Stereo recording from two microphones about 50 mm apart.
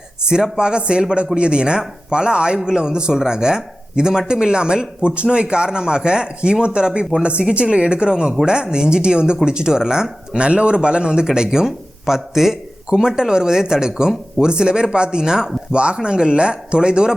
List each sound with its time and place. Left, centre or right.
0.2 s speech: centre